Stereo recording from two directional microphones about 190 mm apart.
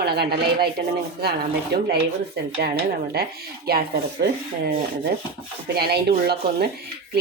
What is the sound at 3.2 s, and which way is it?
Speech, 55° right (ahead or behind).